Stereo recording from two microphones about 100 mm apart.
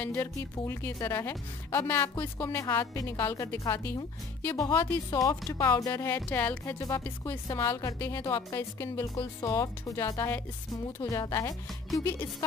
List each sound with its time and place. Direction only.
0.0 s a woman's voice: 20° left (ahead or behind)
4.7 s speech: 35° left (ahead or behind)
6.0 s a woman's voice: 20° left (ahead or behind)
6.8 s a woman's voice: 35° left (ahead or behind)
8.5 s a woman's voice: 25° left (ahead or behind)
11.1 s a woman's voice: 35° left (ahead or behind)